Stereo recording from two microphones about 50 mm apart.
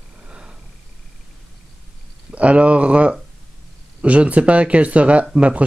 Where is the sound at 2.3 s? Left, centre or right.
Right.